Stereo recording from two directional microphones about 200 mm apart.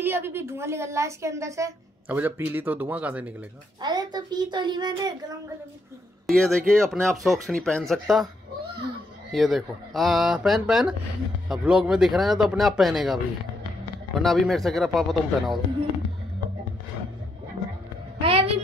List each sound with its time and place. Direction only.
0.0 s a woman's voice: 10° right (ahead or behind)
3.8 s a woman's voice: 20° right (ahead or behind)
6.2 s speech: 5° left (ahead or behind)
9.3 s speech: centre (ahead or behind)
14.2 s speech: centre (ahead or behind)
18.2 s a sound: 30° right (ahead or behind)